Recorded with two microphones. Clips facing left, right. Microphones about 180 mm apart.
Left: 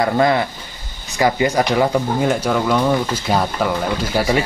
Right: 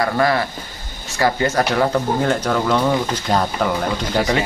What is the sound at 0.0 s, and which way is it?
Speech, 20° left (ahead or behind).